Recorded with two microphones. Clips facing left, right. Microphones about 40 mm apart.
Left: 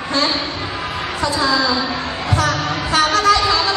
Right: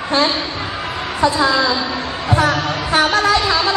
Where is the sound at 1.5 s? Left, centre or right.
Centre.